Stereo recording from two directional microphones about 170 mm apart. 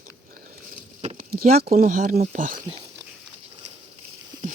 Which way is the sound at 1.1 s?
60° right (ahead or behind).